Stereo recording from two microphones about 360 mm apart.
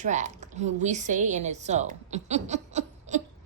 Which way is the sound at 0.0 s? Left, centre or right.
Centre.